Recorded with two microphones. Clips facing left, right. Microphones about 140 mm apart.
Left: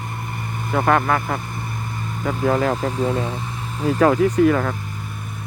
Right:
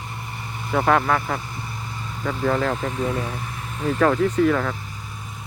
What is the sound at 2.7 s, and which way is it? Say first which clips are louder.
Speech: left 3 dB; 35° left (ahead or behind).